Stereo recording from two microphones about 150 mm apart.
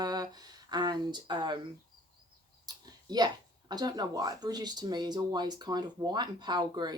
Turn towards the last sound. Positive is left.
turn(degrees=-30)  # may be behind; listen again after turning